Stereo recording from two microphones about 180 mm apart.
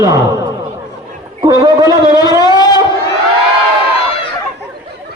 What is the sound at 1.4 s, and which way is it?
Speech, 25° right (ahead or behind).